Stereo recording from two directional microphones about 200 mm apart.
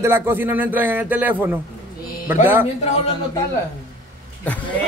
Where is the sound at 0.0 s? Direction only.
10° right (ahead or behind).